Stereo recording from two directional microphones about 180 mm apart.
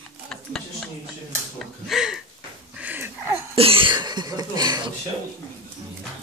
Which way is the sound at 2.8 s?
10° right (ahead or behind).